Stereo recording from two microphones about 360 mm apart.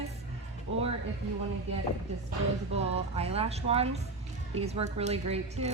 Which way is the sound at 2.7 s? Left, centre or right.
Centre.